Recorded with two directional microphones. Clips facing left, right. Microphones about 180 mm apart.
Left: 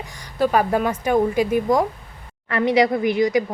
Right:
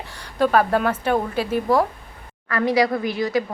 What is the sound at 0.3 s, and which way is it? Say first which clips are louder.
Speech: even; 10° left (ahead or behind).